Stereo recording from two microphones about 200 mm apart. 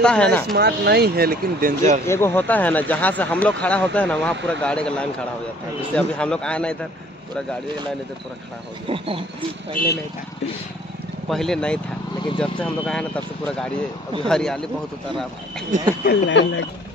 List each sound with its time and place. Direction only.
0.0 s speech: 5° left (ahead or behind)
0.6 s speech: 55° right (ahead or behind)
2.0 s speech: 10° left (ahead or behind)
8.8 s speech: 25° right (ahead or behind)
9.8 s speech: 45° left (ahead or behind)
11.2 s speech: centre (ahead or behind)
16.0 s speech: 60° left (ahead or behind)